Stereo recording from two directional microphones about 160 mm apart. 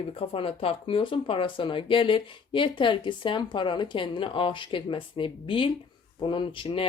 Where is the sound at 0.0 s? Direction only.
35° left (ahead or behind).